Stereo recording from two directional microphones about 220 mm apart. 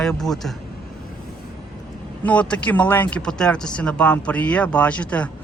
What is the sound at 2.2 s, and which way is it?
Speech, 5° left (ahead or behind).